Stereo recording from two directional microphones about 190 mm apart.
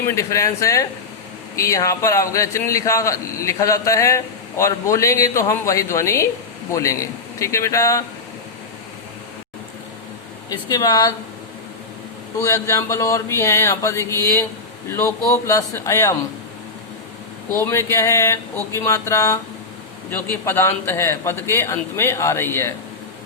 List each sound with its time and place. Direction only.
0.1 s a man's voice: 15° left (ahead or behind)
10.5 s speech: 20° left (ahead or behind)
12.4 s a man's voice: 15° left (ahead or behind)
17.5 s a man's voice: 15° left (ahead or behind)